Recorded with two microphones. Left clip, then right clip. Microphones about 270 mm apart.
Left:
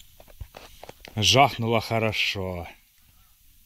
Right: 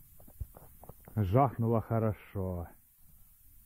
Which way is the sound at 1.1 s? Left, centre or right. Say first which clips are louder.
Left 11 dB; left.